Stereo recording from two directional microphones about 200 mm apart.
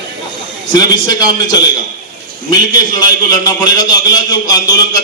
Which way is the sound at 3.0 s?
20° left (ahead or behind).